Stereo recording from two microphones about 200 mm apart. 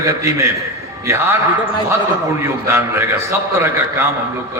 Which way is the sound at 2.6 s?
10° right (ahead or behind).